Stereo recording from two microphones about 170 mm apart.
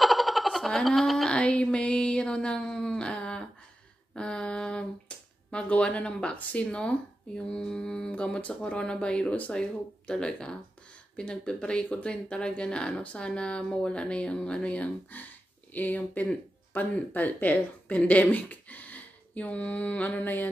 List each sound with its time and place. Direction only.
0.0 s speech: centre (ahead or behind)